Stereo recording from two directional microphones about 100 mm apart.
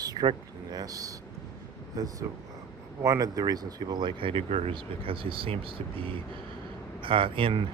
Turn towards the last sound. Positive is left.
turn(degrees=-60)  # may be behind; listen again after turning